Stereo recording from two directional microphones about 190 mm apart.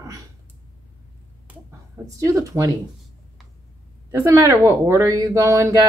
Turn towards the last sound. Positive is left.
turn(degrees=-15)  # may be behind; listen again after turning